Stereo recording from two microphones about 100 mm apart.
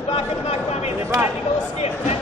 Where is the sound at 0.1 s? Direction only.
90° left.